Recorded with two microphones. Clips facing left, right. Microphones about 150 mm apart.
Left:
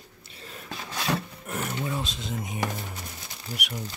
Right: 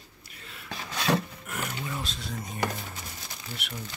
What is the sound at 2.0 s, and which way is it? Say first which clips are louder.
Speech: left 3 dB; 20° left (ahead or behind).